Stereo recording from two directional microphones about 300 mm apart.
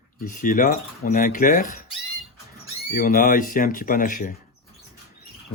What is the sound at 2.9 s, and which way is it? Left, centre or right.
Speech, left.